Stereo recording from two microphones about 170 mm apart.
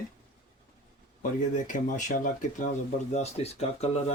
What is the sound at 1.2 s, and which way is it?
Speech, 50° left (ahead or behind).